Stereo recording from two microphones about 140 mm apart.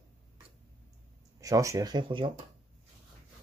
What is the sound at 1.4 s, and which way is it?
Speech, 25° right (ahead or behind).